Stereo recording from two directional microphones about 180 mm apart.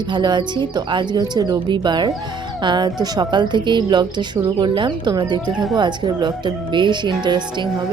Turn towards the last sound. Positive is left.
turn(degrees=-25)  # may be behind; listen again after turning